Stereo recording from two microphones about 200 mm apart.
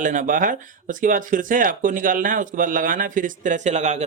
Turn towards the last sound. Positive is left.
turn(degrees=-35)  # may be behind; listen again after turning